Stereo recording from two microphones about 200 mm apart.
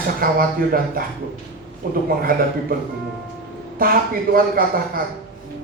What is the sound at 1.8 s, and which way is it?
Speech, 45° right (ahead or behind).